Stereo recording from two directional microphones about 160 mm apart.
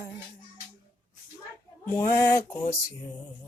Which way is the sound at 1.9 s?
15° left (ahead or behind).